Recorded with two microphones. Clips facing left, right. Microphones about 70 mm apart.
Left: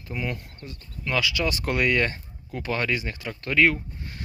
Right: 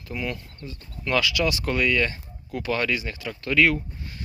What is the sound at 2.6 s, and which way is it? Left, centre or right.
Speech, left.